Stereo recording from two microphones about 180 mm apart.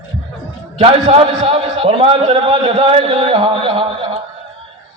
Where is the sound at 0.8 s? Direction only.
30° right (ahead or behind).